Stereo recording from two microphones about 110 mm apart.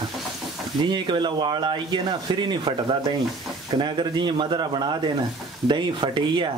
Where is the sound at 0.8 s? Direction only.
45° right (ahead or behind).